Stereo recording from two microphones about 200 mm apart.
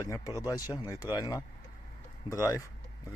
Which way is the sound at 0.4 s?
20° left (ahead or behind).